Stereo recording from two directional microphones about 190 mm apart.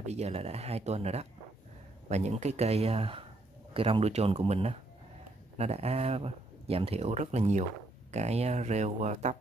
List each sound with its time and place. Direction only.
0.0 s speech: 35° right (ahead or behind)